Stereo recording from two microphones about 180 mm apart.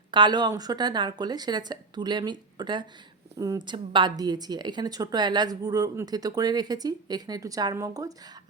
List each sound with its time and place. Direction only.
0.1 s a woman's voice: 25° right (ahead or behind)